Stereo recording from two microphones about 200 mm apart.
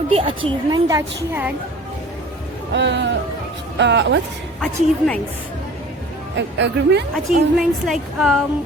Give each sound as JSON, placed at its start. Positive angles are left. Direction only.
{"t": 0.1, "sound": "a woman's voice", "side_deg": -30}
{"t": 2.7, "sound": "speech", "side_deg": -60}
{"t": 4.6, "sound": "a woman's voice", "side_deg": 5}
{"t": 6.3, "sound": "speech", "side_deg": -65}
{"t": 7.3, "sound": "a woman's voice", "side_deg": 0}